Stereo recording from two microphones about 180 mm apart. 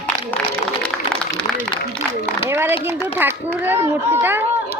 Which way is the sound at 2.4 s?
15° right (ahead or behind).